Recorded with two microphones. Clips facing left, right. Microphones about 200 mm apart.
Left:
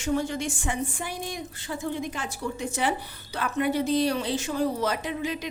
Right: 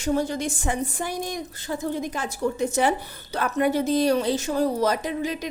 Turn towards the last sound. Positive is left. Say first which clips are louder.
# right 3 dB
turn(degrees=-40)  # may be behind; listen again after turning